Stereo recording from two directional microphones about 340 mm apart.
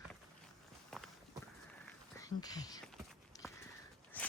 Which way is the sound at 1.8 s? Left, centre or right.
Centre.